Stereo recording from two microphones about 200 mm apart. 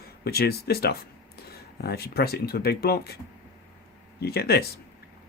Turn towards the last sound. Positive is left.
turn(degrees=50)  # may be behind; listen again after turning